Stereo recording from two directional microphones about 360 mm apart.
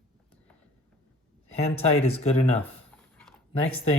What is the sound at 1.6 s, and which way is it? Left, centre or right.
Speech, centre.